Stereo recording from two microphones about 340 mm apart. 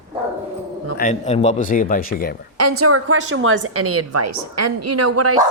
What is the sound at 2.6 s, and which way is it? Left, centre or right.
A woman's voice, right.